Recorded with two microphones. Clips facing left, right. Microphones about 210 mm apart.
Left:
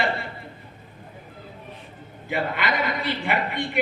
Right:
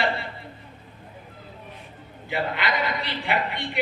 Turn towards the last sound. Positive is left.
turn(degrees=50)  # may be behind; listen again after turning